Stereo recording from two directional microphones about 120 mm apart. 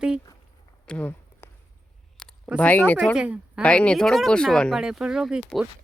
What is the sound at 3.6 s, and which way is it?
Speech, 10° left (ahead or behind).